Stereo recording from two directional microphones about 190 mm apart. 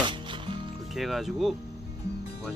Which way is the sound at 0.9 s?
Centre (ahead or behind).